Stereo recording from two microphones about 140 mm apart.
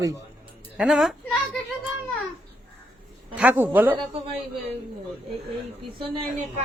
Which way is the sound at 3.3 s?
10° right (ahead or behind).